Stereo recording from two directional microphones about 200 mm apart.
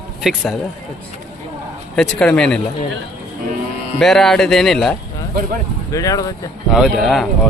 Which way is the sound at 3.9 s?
Centre (ahead or behind).